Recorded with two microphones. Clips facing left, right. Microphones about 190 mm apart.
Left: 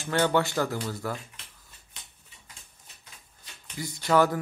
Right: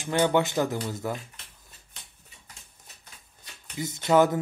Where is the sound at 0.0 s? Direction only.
15° right (ahead or behind).